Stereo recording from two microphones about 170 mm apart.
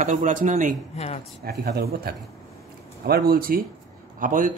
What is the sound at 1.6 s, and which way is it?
Speech, 75° right (ahead or behind).